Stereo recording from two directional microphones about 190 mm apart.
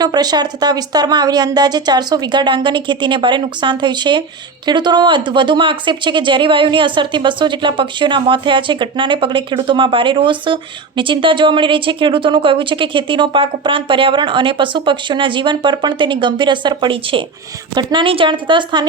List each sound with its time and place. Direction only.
0.0 s speech: 20° right (ahead or behind)